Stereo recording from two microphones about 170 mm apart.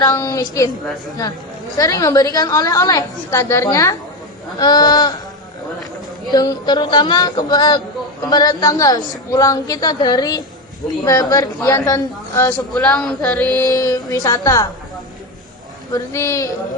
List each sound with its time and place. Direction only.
0.0 s a woman's voice: 20° left (ahead or behind)
1.7 s a woman's voice: 20° left (ahead or behind)
6.3 s a woman's voice: 25° left (ahead or behind)
12.7 s music: 5° left (ahead or behind)
13.6 s a woman's voice: 20° left (ahead or behind)
15.9 s a man's voice: 15° left (ahead or behind)